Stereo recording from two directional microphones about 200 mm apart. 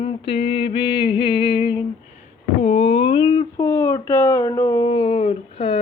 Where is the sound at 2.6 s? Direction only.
30° left (ahead or behind).